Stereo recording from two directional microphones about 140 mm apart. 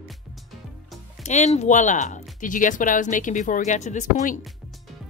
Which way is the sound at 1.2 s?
55° left (ahead or behind).